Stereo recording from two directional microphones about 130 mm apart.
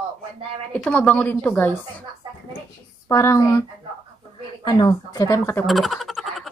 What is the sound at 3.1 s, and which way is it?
Speech, 20° left (ahead or behind).